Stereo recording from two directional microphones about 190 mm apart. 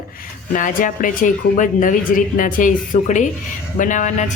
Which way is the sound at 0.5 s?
45° left (ahead or behind).